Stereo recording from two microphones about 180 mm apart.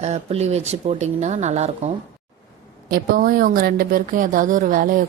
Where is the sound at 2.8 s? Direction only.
55° right (ahead or behind).